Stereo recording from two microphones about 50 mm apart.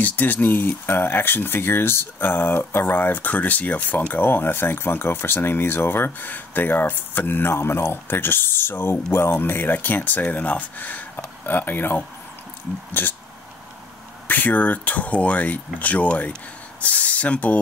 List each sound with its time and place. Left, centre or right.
0.0 s speech: left
14.2 s speech: left